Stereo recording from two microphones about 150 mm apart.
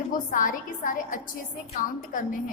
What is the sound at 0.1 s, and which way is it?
A woman's voice, 65° left (ahead or behind).